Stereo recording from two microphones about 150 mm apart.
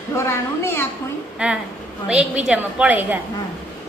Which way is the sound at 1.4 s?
5° right (ahead or behind).